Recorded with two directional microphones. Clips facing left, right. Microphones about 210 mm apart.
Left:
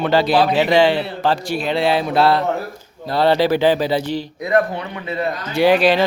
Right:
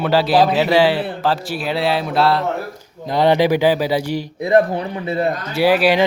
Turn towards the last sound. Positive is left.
turn(degrees=-10)  # may be behind; listen again after turning